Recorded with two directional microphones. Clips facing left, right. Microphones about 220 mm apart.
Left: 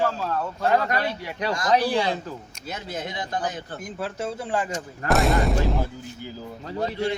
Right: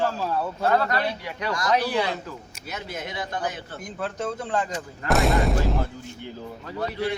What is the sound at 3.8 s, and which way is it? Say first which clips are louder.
A man's voice: right 1 dB; 5° left (ahead or behind).